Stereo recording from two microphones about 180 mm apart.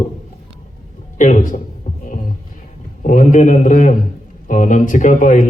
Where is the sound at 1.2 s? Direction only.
45° left (ahead or behind).